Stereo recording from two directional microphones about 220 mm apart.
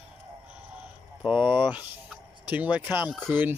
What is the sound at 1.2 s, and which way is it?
Speech, 5° right (ahead or behind).